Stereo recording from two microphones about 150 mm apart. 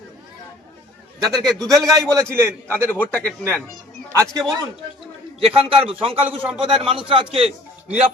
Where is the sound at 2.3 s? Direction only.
20° right (ahead or behind).